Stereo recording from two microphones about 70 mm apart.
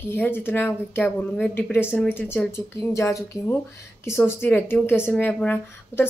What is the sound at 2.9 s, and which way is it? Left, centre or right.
Speech, left.